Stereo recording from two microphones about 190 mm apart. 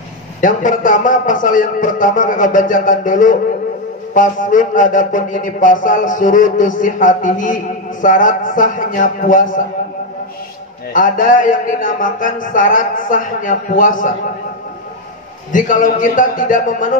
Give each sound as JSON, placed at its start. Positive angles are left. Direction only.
{"t": 0.4, "sound": "speech", "side_deg": 45}
{"t": 10.9, "sound": "speech", "side_deg": 45}
{"t": 15.5, "sound": "speech", "side_deg": 45}